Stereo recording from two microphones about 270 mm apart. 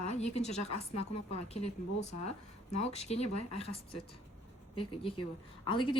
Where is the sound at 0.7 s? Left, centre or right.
Left.